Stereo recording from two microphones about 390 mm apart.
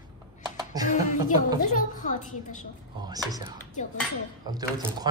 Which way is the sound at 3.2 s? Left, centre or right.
Centre.